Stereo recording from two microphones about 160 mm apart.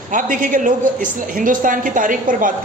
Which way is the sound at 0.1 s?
55° right (ahead or behind).